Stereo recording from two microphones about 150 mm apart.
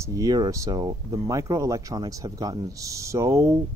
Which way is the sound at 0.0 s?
25° right (ahead or behind).